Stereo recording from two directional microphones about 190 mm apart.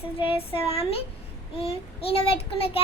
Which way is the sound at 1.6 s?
30° left (ahead or behind).